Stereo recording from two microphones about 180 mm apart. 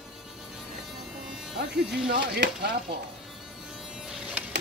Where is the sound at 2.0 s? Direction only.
60° right (ahead or behind).